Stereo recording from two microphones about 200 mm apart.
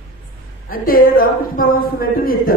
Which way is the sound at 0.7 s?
45° left (ahead or behind).